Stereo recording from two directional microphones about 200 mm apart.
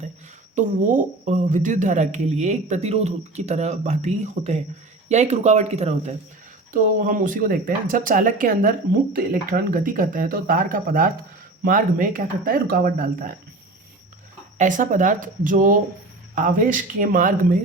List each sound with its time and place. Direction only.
0.5 s a woman's voice: 40° right (ahead or behind)
14.6 s a woman's voice: 40° right (ahead or behind)